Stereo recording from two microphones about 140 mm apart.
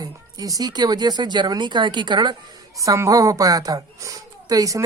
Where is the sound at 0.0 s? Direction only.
25° right (ahead or behind).